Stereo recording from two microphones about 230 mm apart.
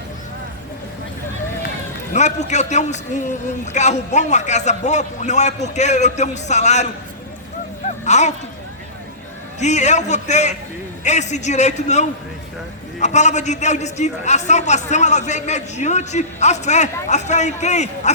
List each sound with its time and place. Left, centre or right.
2.1 s a man's voice: left
7.9 s a sound: left
9.6 s a man's voice: left